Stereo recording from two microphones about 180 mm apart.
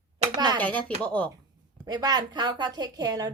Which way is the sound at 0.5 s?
10° left (ahead or behind).